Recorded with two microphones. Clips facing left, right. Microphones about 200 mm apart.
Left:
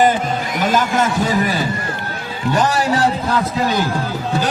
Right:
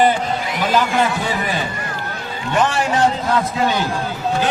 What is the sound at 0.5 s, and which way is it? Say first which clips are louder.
A man's voice: left 1 dB; 45° left (ahead or behind).